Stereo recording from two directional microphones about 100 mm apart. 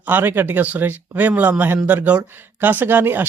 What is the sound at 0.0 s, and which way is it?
Speech, 20° right (ahead or behind).